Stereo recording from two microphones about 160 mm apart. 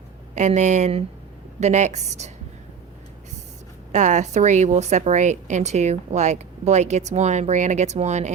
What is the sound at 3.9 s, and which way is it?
A woman's voice, 50° right (ahead or behind).